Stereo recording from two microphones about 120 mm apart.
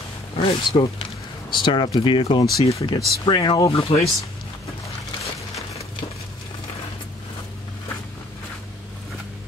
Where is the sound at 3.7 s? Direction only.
55° left (ahead or behind).